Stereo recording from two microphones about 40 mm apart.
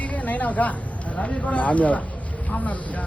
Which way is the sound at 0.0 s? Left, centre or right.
Left.